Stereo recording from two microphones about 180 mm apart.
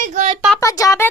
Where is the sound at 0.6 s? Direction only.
20° left (ahead or behind).